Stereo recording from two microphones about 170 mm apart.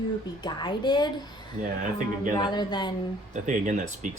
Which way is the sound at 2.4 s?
25° left (ahead or behind).